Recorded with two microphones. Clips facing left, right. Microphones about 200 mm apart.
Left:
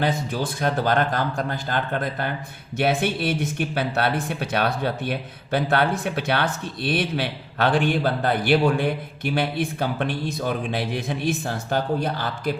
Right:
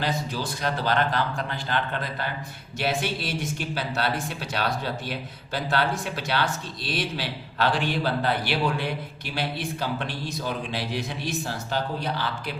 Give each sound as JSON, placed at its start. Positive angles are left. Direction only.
{"t": 0.0, "sound": "a man's voice", "side_deg": 55}